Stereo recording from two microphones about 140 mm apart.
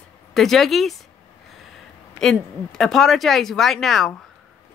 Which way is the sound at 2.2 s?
5° left (ahead or behind).